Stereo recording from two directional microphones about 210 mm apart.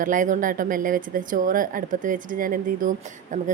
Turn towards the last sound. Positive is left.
turn(degrees=-40)  # may be behind; listen again after turning